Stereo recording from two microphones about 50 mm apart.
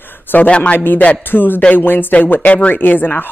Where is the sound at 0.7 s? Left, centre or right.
Left.